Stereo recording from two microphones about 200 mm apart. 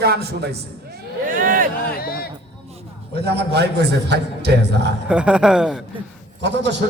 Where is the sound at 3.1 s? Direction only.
55° right (ahead or behind).